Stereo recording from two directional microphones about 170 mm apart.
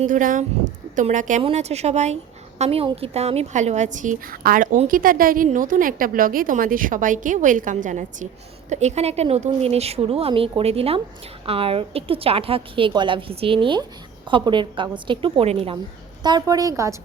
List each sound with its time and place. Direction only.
0.0 s speech: 50° right (ahead or behind)
1.4 s a woman's voice: 35° right (ahead or behind)
16.2 s a woman's voice: 25° right (ahead or behind)